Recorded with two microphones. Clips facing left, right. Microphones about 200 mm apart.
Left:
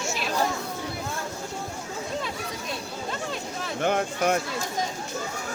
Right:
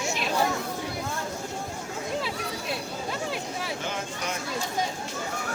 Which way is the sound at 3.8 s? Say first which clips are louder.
Left 8 dB; 60° left (ahead or behind).